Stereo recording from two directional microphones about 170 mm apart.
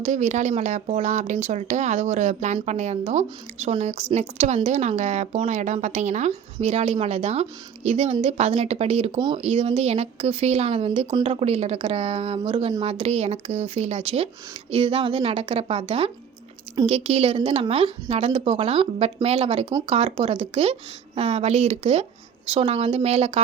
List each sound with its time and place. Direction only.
0.0 s speech: 45° right (ahead or behind)